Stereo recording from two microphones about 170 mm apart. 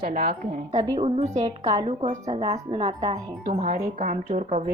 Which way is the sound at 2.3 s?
35° right (ahead or behind).